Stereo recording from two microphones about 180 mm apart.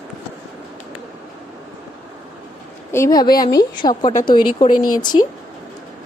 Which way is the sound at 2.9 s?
15° left (ahead or behind).